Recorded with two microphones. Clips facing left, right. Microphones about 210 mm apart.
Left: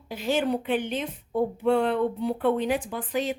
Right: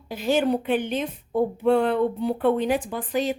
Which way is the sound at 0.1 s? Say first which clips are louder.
Right 3 dB; 40° right (ahead or behind).